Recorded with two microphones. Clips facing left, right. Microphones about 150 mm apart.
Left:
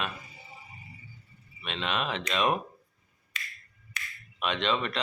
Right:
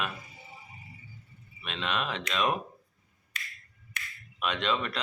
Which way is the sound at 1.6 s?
Centre (ahead or behind).